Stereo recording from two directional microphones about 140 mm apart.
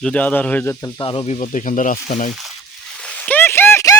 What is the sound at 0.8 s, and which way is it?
Speech, 35° left (ahead or behind).